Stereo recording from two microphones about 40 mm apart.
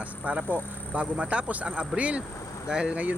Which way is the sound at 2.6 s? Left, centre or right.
Right.